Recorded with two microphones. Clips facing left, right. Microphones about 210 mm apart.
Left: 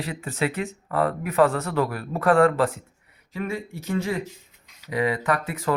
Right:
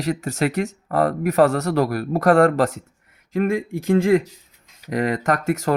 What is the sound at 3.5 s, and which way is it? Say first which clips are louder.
Speech: right 8 dB; 90° right.